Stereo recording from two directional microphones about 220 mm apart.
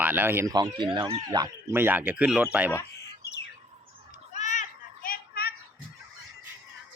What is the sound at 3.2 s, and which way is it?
Squawk, 50° left (ahead or behind).